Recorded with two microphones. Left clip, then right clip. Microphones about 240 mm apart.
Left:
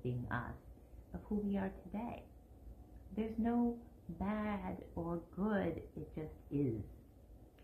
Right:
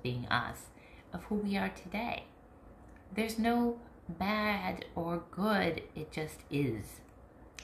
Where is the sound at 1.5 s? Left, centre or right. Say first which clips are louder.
Right 7 dB; right.